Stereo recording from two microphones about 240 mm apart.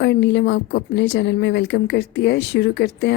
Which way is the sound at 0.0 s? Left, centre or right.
Left.